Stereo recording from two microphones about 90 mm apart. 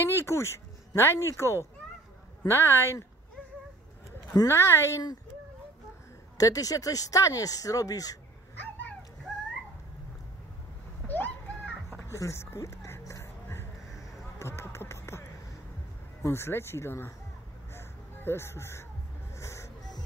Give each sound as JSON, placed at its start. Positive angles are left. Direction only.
{"t": 0.0, "sound": "speech", "side_deg": 30}
{"t": 4.5, "sound": "speech", "side_deg": 30}
{"t": 6.3, "sound": "speech", "side_deg": 40}
{"t": 11.1, "sound": "a sound", "side_deg": 20}
{"t": 12.0, "sound": "music", "side_deg": 35}
{"t": 16.2, "sound": "speech", "side_deg": 30}
{"t": 17.7, "sound": "a sound", "side_deg": 25}
{"t": 19.3, "sound": "music", "side_deg": 30}